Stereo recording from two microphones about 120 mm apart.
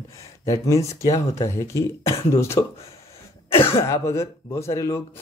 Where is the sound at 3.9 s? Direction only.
25° left (ahead or behind).